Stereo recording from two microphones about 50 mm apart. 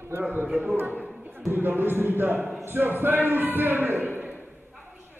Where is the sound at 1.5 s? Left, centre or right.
Right.